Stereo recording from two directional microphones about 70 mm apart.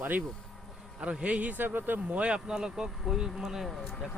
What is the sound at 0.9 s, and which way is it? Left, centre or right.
Speech, centre.